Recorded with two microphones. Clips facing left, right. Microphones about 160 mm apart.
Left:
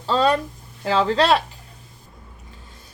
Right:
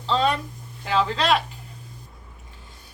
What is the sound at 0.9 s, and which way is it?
Speech, 35° left (ahead or behind).